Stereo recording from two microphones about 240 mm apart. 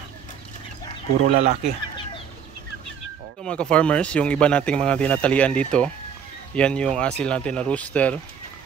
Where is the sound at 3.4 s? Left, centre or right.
Centre.